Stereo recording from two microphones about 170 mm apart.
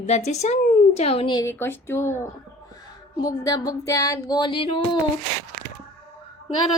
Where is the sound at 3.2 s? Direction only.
20° left (ahead or behind).